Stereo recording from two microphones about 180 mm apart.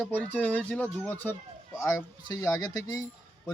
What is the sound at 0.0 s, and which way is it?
Speech, 10° left (ahead or behind).